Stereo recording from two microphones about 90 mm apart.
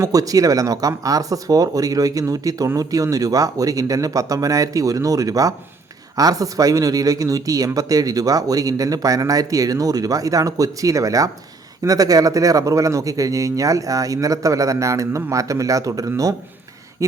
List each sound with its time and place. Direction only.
0.0 s speech: 40° right (ahead or behind)